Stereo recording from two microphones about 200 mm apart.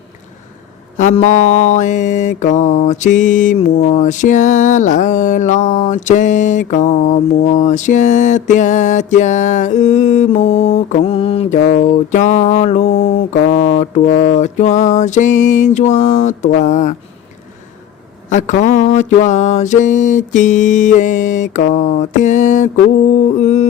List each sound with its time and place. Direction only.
0.9 s mantra: 35° left (ahead or behind)
18.3 s mantra: 35° left (ahead or behind)